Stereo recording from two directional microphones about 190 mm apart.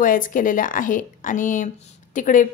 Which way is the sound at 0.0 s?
45° left (ahead or behind).